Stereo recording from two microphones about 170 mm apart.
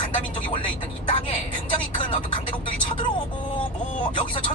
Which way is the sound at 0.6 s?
30° left (ahead or behind).